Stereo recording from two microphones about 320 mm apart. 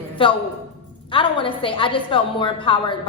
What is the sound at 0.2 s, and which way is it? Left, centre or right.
A woman's voice, centre.